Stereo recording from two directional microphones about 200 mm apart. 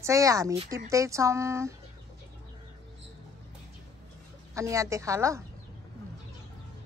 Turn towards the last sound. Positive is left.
turn(degrees=-15)  # may be behind; listen again after turning